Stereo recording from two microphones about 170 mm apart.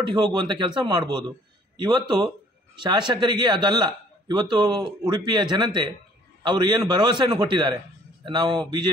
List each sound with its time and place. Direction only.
0.0 s speech: 25° right (ahead or behind)